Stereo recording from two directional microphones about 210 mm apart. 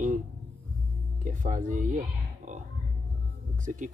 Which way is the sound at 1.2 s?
40° right (ahead or behind).